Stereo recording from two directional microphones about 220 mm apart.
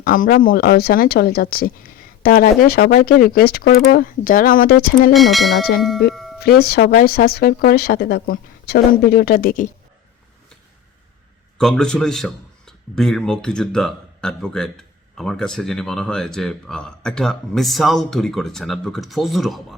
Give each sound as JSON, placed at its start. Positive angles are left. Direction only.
{"t": 0.0, "sound": "a woman's voice", "side_deg": 40}
{"t": 5.1, "sound": "a man's voice", "side_deg": 0}
{"t": 6.6, "sound": "a woman's voice", "side_deg": 45}
{"t": 11.5, "sound": "a man's voice", "side_deg": 5}